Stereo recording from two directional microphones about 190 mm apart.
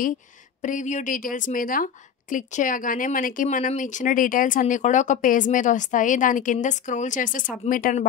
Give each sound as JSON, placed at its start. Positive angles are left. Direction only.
{"t": 0.6, "sound": "a woman's voice", "side_deg": 40}